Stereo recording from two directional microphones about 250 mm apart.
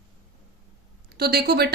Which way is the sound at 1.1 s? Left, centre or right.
Right.